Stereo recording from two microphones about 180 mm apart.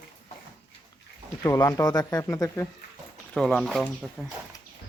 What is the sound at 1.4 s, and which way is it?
Speech, 20° left (ahead or behind).